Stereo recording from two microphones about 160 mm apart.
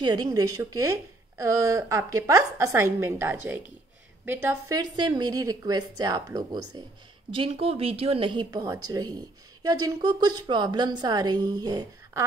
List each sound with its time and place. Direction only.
0.0 s a woman's voice: 25° right (ahead or behind)